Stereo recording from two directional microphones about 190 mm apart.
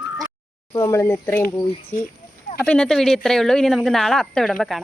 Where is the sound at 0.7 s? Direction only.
15° left (ahead or behind).